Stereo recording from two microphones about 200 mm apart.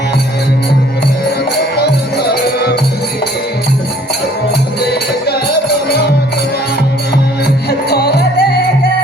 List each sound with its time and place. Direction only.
1.7 s music: 55° left (ahead or behind)
7.7 s music: 50° left (ahead or behind)